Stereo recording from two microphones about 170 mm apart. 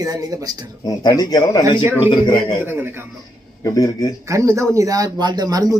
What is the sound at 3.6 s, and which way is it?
Speech, 20° left (ahead or behind).